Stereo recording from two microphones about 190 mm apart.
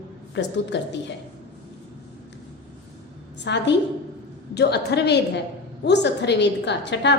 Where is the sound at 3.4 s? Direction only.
65° left (ahead or behind).